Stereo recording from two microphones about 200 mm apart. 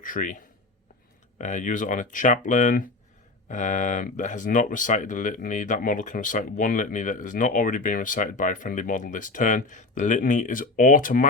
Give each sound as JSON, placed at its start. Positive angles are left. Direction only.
{"t": 0.0, "sound": "speech", "side_deg": 40}
{"t": 1.4, "sound": "speech", "side_deg": 40}